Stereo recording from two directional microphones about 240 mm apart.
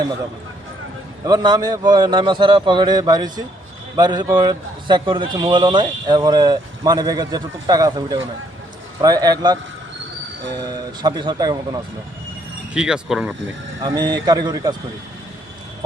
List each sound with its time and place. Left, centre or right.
1.2 s a man's voice: centre
11.0 s a man's voice: centre
12.7 s speech: centre
13.8 s a man's voice: centre